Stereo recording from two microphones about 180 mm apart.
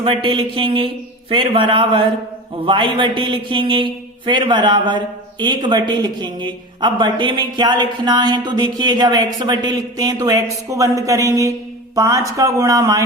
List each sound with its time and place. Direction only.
0.0 s a man's voice: 30° right (ahead or behind)